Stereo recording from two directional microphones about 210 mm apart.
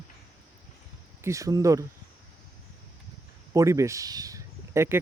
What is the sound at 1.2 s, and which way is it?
Speech, 15° right (ahead or behind).